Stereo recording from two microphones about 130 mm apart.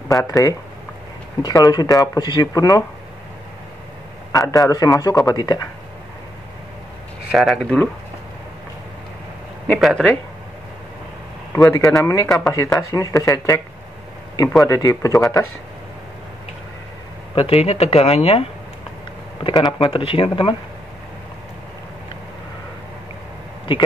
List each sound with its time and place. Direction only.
0.1 s speech: 25° left (ahead or behind)
4.3 s speech: 25° left (ahead or behind)
7.2 s speech: centre (ahead or behind)
9.8 s speech: centre (ahead or behind)
11.5 s speech: 25° left (ahead or behind)
14.6 s speech: 25° left (ahead or behind)
17.4 s speech: 50° left (ahead or behind)
19.4 s speech: 35° left (ahead or behind)